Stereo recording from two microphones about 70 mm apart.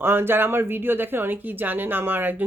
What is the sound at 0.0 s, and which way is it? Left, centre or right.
Speech, right.